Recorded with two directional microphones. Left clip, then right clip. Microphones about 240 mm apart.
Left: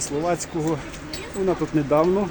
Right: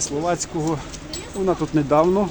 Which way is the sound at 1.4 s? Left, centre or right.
Centre.